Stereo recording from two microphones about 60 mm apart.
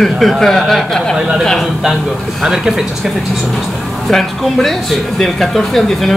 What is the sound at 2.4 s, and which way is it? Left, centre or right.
Speech, centre.